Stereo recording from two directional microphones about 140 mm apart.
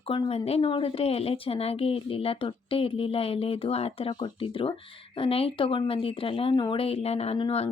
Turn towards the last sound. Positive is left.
turn(degrees=45)  # may be behind; listen again after turning